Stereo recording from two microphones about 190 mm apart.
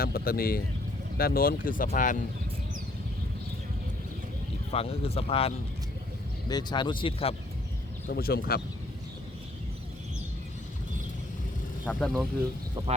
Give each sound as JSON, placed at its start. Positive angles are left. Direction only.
{"t": 0.0, "sound": "speech", "side_deg": 50}
{"t": 4.7, "sound": "speech", "side_deg": 30}
{"t": 8.0, "sound": "speech", "side_deg": 50}
{"t": 11.9, "sound": "speech", "side_deg": 5}